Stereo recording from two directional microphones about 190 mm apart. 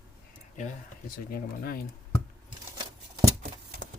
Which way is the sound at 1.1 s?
50° left (ahead or behind).